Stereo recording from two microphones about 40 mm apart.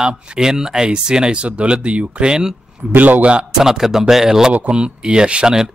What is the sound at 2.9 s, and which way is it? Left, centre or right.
Speech, right.